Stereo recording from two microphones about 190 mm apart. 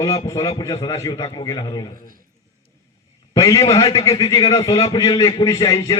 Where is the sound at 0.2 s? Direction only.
15° left (ahead or behind).